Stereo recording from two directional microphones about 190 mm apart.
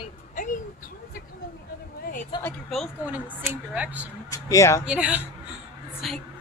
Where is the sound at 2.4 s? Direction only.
Centre (ahead or behind).